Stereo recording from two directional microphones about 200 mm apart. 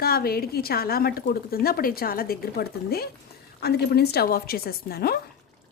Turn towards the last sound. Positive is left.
turn(degrees=50)  # may be behind; listen again after turning